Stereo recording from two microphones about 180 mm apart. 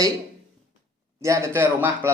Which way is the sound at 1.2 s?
15° right (ahead or behind).